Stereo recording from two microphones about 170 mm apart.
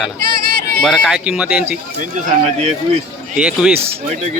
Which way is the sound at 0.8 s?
Centre (ahead or behind).